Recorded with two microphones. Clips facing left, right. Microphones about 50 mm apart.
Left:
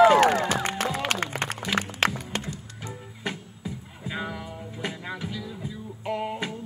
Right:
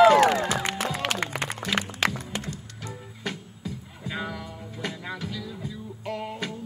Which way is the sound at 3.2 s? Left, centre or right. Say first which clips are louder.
Left 1 dB; centre.